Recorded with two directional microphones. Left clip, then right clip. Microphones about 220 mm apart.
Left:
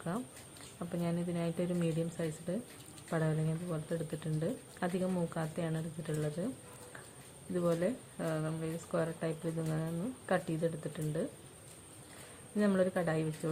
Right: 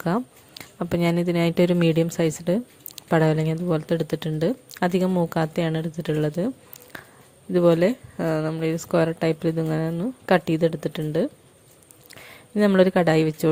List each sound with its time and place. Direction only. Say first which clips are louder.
0.8 s speech: right 15 dB; 50° right (ahead or behind)
7.5 s speech: right 15 dB; 45° right (ahead or behind)
12.5 s speech: right 14 dB; 45° right (ahead or behind)